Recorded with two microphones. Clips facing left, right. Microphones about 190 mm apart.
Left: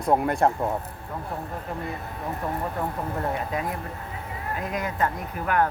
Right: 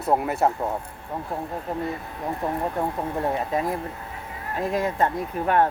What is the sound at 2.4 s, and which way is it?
Speech, 25° right (ahead or behind).